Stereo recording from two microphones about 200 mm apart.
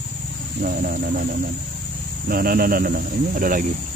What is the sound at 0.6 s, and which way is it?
Speech, 45° right (ahead or behind).